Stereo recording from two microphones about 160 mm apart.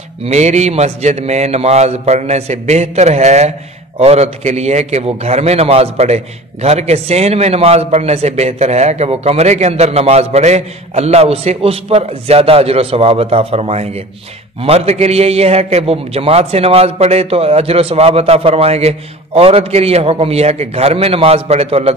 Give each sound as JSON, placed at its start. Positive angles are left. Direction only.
{"t": 0.2, "sound": "a man's voice", "side_deg": -45}